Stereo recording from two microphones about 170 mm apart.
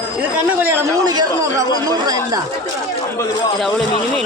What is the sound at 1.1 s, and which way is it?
A man's voice, 20° right (ahead or behind).